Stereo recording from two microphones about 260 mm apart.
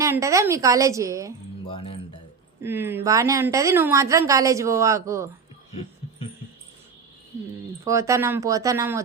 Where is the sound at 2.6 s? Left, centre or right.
Centre.